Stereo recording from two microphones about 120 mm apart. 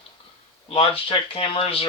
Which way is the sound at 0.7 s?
50° left (ahead or behind).